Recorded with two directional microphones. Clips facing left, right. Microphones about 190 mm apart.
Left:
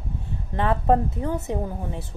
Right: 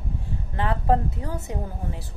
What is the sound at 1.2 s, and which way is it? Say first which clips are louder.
Speech: left 5 dB; 20° left (ahead or behind).